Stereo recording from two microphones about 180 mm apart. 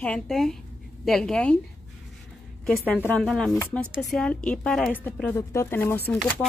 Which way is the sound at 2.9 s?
10° left (ahead or behind).